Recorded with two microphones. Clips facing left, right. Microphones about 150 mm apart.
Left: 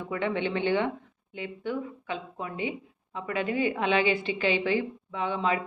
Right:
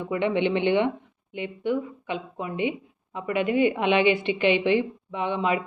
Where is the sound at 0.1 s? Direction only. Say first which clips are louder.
Right 5 dB; 20° right (ahead or behind).